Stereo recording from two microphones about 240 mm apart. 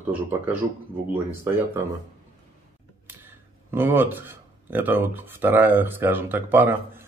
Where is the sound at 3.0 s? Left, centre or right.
Centre.